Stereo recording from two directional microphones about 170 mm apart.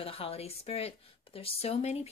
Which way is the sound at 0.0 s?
35° left (ahead or behind).